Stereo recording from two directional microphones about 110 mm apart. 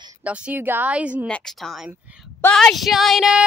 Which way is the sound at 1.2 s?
5° left (ahead or behind).